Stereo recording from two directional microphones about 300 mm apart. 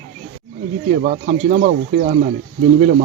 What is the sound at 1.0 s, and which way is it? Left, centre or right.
Speech, right.